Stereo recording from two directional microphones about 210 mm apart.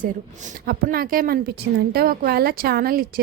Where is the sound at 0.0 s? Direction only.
40° right (ahead or behind).